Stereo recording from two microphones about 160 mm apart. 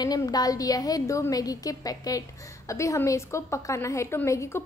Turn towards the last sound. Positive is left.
turn(degrees=15)  # may be behind; listen again after turning